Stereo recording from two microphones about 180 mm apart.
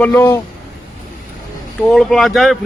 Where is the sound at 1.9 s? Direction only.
Centre (ahead or behind).